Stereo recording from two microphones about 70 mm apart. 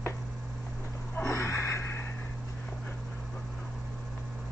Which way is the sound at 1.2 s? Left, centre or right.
Left.